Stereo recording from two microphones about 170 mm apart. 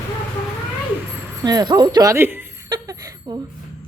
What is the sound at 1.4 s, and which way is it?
A woman's voice, 20° right (ahead or behind).